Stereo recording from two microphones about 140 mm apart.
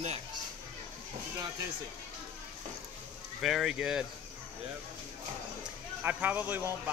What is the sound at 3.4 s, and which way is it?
Speech, 5° right (ahead or behind).